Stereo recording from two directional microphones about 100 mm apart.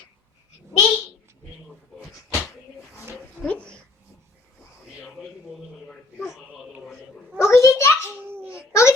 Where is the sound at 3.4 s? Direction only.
10° left (ahead or behind).